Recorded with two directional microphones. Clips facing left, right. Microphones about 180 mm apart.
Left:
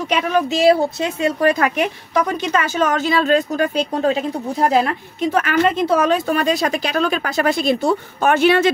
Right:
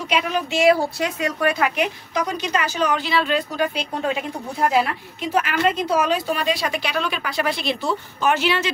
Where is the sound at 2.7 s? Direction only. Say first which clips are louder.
Left 4 dB; 45° left (ahead or behind).